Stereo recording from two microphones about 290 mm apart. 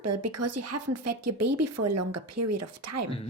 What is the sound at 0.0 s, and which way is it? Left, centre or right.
Speech, right.